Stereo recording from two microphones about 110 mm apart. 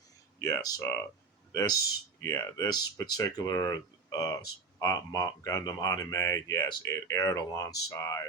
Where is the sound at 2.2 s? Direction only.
30° left (ahead or behind).